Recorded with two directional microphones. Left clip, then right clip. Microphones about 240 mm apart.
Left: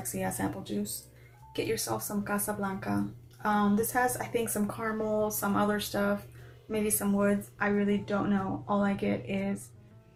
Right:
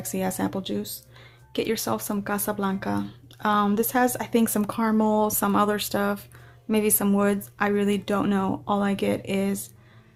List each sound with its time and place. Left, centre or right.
0.1 s speech: right